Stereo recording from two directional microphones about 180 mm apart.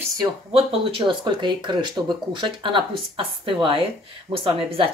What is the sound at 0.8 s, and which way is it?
Speech, 30° right (ahead or behind).